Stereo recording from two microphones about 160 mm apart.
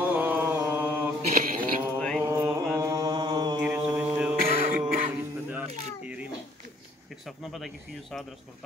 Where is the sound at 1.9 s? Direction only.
5° left (ahead or behind).